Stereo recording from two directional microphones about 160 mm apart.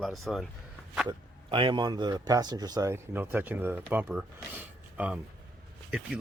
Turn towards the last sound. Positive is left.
turn(degrees=-5)  # may be behind; listen again after turning